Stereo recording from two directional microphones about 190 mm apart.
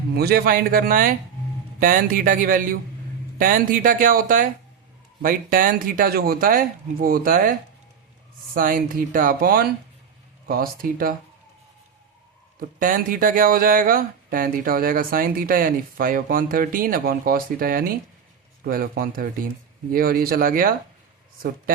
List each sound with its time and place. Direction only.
0.1 s speech: 55° right (ahead or behind)
8.5 s speech: 45° right (ahead or behind)
12.5 s speech: 45° right (ahead or behind)